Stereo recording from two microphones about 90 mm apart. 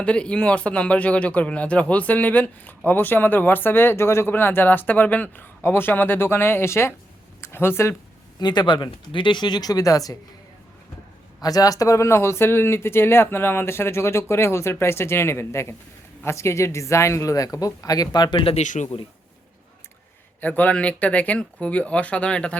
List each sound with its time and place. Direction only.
0.0 s speech: 10° left (ahead or behind)
8.4 s speech: 55° left (ahead or behind)
11.3 s speech: 45° left (ahead or behind); by 19.0 s 70° left (ahead or behind)
20.4 s speech: 20° left (ahead or behind)